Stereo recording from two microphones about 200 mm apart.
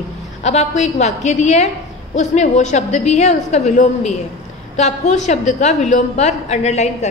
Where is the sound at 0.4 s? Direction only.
35° left (ahead or behind).